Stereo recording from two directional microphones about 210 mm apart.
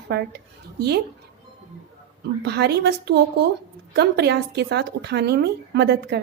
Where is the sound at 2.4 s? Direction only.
50° right (ahead or behind).